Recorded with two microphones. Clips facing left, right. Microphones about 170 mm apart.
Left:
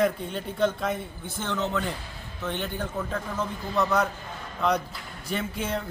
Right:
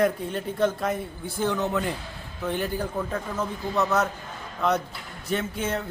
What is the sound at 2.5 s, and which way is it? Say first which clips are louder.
A man's voice: right 3 dB; 5° right (ahead or behind).